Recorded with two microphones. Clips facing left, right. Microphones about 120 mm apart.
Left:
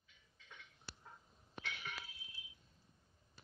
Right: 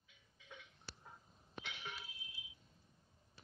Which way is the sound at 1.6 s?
20° right (ahead or behind).